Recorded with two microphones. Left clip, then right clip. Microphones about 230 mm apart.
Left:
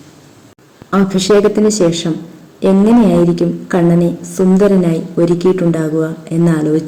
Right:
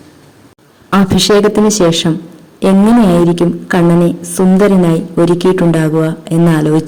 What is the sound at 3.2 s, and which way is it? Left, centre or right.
A woman's voice, right.